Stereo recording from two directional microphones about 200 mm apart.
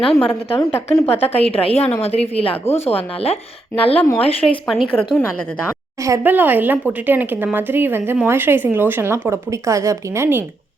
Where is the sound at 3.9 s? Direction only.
10° left (ahead or behind).